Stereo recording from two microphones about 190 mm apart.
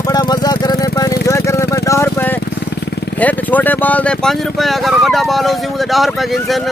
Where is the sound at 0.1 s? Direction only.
20° left (ahead or behind).